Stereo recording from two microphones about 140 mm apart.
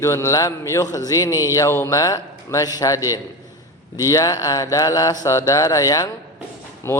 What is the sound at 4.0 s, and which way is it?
A man's voice, 25° left (ahead or behind).